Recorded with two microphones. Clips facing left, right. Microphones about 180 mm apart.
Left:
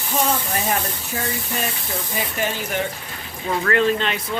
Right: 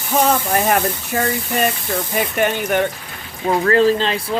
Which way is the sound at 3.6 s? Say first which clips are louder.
Right 4 dB; 35° right (ahead or behind).